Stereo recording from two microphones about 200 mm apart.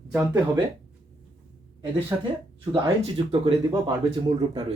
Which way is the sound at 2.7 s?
25° right (ahead or behind).